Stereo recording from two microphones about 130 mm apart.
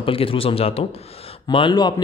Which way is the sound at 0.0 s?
45° left (ahead or behind).